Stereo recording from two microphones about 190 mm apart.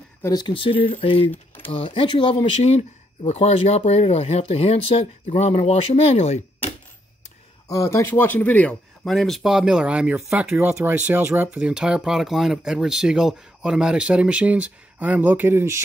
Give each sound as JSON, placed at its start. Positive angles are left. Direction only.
{"t": 0.2, "sound": "speech", "side_deg": 20}
{"t": 7.6, "sound": "speech", "side_deg": 15}